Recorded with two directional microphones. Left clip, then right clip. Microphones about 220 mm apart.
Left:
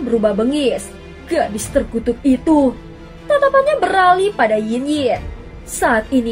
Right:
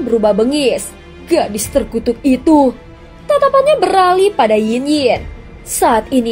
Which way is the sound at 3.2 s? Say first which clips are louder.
Right 3 dB; 30° right (ahead or behind).